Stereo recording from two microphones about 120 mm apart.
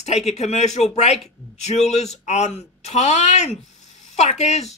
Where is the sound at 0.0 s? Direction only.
65° left (ahead or behind).